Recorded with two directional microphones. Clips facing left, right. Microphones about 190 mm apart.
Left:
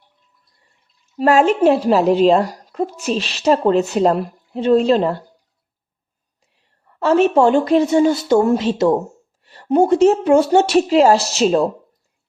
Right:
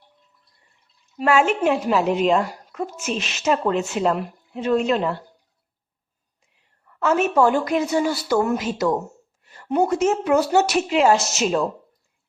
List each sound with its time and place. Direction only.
1.1 s a woman's voice: 40° left (ahead or behind)
6.6 s a woman's voice: 30° left (ahead or behind)